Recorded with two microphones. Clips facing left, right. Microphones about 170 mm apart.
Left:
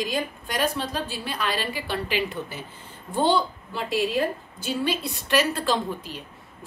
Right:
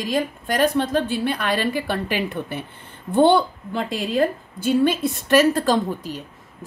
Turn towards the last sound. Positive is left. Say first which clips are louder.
# right 5 dB
turn(degrees=-45)  # may be behind; listen again after turning